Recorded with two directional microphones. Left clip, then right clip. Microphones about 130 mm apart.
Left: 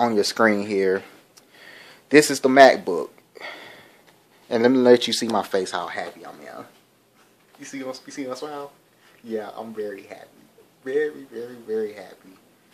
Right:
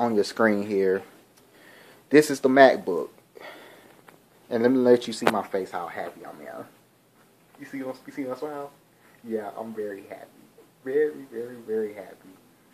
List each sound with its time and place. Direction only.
0.0 s speech: 15° left (ahead or behind)
1.7 s a sound: 15° left (ahead or behind)
4.5 s speech: 25° left (ahead or behind)
5.3 s speech: 75° left (ahead or behind)
5.9 s speech: 25° left (ahead or behind)
7.7 s speech: 20° left (ahead or behind)